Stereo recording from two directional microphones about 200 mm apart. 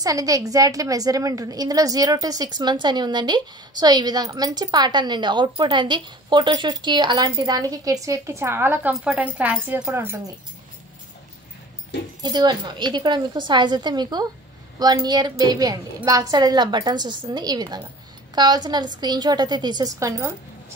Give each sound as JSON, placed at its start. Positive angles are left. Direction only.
{"t": 0.0, "sound": "a woman's voice", "side_deg": -15}
{"t": 12.2, "sound": "a woman's voice", "side_deg": -20}